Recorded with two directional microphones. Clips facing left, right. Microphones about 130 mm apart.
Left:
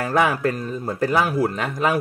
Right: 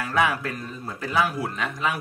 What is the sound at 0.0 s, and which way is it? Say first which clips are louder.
Speech: left 5 dB; 45° left (ahead or behind).